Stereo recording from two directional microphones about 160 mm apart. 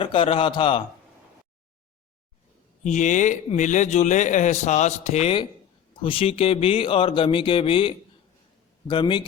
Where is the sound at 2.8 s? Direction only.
50° left (ahead or behind).